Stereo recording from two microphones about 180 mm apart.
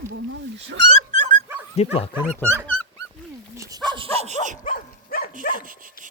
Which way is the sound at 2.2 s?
5° left (ahead or behind).